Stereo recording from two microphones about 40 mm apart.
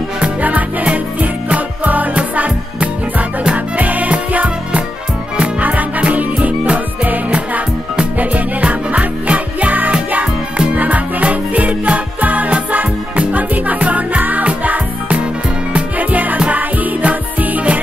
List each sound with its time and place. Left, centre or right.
0.2 s music: right
8.6 s music: right